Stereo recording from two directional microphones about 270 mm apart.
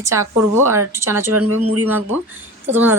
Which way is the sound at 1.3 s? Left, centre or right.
Right.